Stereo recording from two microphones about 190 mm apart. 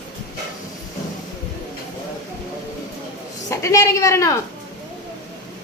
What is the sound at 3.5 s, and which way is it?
Speech, 15° left (ahead or behind).